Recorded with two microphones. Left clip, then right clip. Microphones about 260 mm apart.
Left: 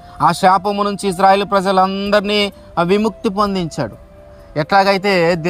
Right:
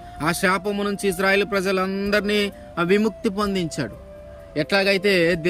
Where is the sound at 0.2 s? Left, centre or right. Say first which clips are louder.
Left 10 dB; centre.